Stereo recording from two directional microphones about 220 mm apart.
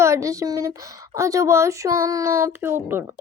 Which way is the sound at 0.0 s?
15° right (ahead or behind).